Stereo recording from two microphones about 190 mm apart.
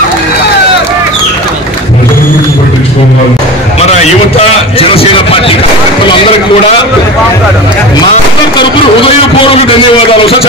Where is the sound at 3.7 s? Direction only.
35° left (ahead or behind).